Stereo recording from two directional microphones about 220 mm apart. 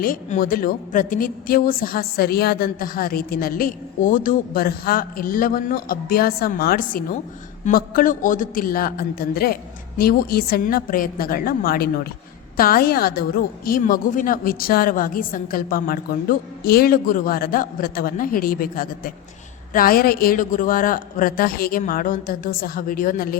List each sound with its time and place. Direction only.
0.0 s a woman's voice: 40° left (ahead or behind)